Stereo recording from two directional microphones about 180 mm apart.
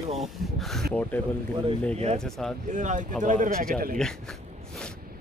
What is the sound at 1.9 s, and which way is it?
Speech, 35° right (ahead or behind).